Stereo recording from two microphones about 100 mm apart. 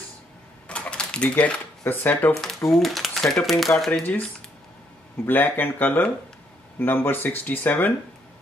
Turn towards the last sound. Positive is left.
turn(degrees=20)  # may be behind; listen again after turning